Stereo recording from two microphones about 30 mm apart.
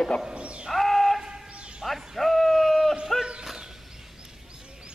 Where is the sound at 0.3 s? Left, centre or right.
Right.